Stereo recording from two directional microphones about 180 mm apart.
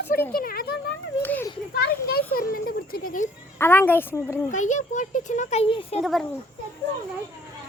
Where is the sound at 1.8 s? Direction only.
60° left (ahead or behind).